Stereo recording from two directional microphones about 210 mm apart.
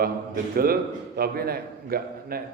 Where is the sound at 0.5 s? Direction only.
45° right (ahead or behind).